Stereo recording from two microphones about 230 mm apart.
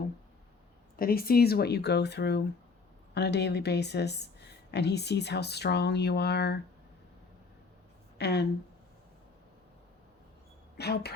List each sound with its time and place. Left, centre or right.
0.9 s speech: left
8.2 s speech: left
10.8 s speech: left